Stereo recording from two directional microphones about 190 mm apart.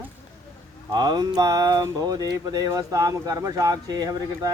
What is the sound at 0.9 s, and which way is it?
Speech, 20° right (ahead or behind).